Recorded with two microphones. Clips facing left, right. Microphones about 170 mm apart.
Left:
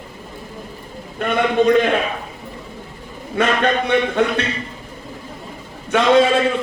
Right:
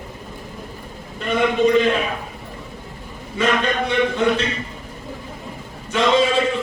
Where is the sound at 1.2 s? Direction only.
60° left (ahead or behind).